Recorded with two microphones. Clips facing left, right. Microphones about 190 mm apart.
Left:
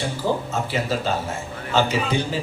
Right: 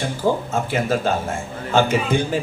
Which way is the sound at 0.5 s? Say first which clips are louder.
Right 3 dB; 50° right (ahead or behind).